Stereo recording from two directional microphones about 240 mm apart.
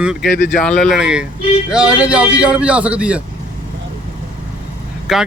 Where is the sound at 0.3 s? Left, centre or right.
Left.